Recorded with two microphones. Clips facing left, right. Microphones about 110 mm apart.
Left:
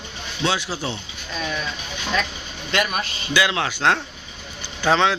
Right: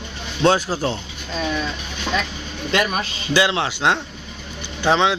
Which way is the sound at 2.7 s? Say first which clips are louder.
Right 2 dB; 35° right (ahead or behind).